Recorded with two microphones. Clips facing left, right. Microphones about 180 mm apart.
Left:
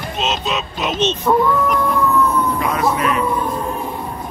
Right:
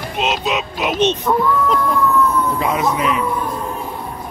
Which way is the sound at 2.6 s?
20° right (ahead or behind).